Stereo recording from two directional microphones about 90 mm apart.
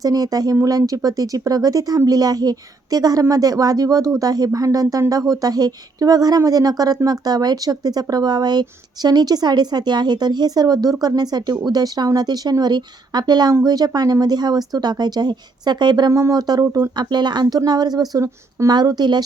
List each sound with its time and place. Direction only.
0.0 s a woman's voice: 45° right (ahead or behind)
16.6 s speech: 30° right (ahead or behind)
17.0 s a woman's voice: 55° right (ahead or behind)
18.7 s a woman's voice: 50° right (ahead or behind)